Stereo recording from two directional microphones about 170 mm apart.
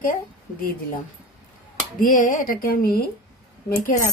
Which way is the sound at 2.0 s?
50° left (ahead or behind).